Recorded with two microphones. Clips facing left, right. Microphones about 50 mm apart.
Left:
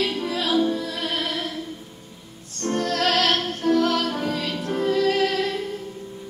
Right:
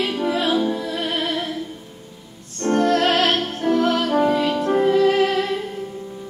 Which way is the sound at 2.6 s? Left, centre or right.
Right.